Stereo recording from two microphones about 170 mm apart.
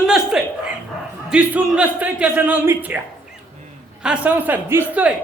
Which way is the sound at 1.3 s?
5° right (ahead or behind).